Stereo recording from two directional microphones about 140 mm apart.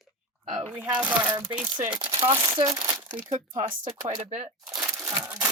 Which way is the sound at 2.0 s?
40° right (ahead or behind).